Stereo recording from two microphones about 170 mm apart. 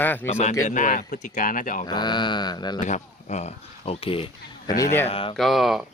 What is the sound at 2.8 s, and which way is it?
Speech, 45° left (ahead or behind).